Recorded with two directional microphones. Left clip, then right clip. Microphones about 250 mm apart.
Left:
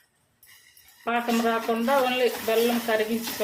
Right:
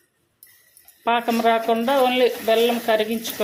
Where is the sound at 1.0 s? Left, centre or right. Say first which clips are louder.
Right 6 dB; right.